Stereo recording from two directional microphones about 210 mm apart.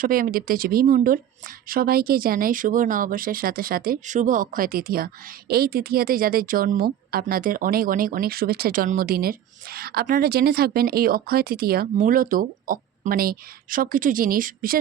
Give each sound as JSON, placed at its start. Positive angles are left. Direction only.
{"t": 0.0, "sound": "a woman's voice", "side_deg": -40}